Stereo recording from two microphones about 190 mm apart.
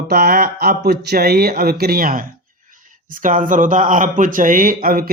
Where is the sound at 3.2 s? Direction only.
45° right (ahead or behind).